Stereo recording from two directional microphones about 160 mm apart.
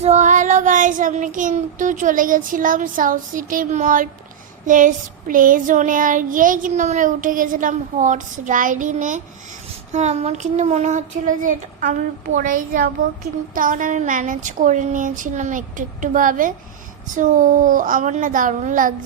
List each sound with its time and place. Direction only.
0.0 s child singing: 45° right (ahead or behind)
9.9 s speech: 45° right (ahead or behind)
17.2 s child singing: 55° right (ahead or behind)